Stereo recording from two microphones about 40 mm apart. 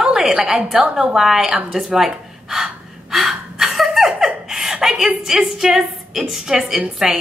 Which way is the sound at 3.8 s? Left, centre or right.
Centre.